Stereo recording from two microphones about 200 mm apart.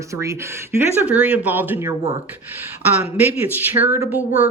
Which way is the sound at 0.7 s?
10° right (ahead or behind).